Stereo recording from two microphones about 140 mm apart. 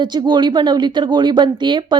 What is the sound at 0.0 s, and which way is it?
A woman's voice, 30° right (ahead or behind).